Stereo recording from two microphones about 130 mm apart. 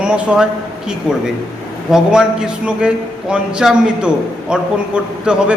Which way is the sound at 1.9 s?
5° right (ahead or behind).